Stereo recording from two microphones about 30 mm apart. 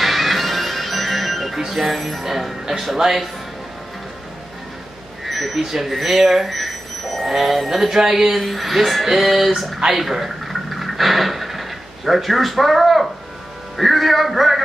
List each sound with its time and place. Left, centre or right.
0.0 s music: centre
1.8 s speech: centre
3.0 s music: centre
5.2 s speech: centre
7.9 s speech: centre
9.0 s music: centre
9.9 s a sound: centre
13.7 s speech: centre